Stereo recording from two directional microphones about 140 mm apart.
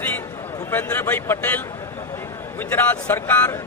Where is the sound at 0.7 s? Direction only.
15° left (ahead or behind).